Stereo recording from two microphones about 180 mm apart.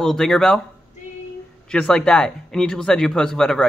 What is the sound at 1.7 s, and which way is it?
A man's voice, 5° left (ahead or behind).